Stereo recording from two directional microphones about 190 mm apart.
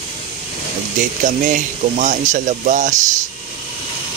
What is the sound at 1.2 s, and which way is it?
Speech, 40° right (ahead or behind).